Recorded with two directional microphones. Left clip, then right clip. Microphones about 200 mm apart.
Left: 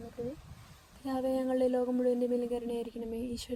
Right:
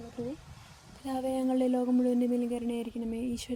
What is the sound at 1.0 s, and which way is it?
A woman's voice, 30° right (ahead or behind).